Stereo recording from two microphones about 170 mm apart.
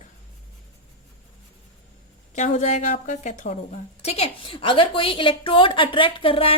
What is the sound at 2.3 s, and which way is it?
A woman's voice, 45° left (ahead or behind).